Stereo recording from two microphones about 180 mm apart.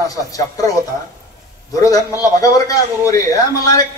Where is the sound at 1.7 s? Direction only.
20° left (ahead or behind).